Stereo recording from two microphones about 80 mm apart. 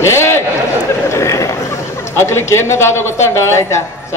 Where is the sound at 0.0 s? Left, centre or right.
Left.